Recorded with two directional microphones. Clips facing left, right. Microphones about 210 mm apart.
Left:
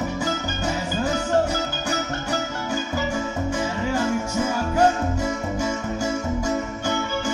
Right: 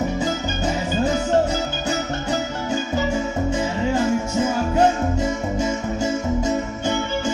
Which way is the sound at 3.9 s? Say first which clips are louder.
Right 3 dB; 25° right (ahead or behind).